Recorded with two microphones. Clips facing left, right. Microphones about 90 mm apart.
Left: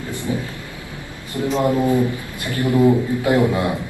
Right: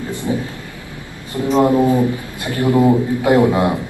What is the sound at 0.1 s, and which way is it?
Speech, 20° right (ahead or behind).